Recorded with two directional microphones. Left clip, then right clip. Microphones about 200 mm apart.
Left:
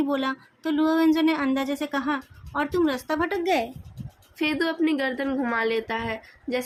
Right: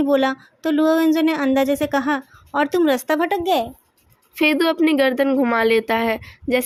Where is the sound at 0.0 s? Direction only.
35° right (ahead or behind).